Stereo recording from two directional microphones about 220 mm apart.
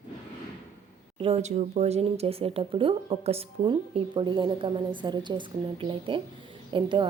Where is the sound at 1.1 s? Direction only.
25° right (ahead or behind).